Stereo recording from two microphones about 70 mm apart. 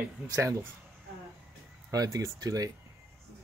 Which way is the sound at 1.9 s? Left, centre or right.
Right.